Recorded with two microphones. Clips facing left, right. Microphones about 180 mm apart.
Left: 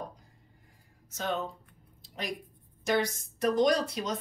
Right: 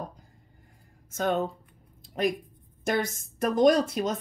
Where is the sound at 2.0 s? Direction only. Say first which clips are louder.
Right 11 dB; 55° right (ahead or behind).